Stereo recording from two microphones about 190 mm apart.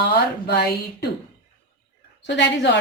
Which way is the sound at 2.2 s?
70° left (ahead or behind).